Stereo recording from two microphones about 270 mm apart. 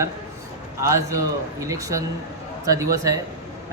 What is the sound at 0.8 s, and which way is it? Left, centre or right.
Speech, centre.